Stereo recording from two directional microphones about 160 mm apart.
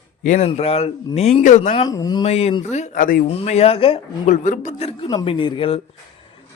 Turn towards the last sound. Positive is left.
turn(degrees=35)  # may be behind; listen again after turning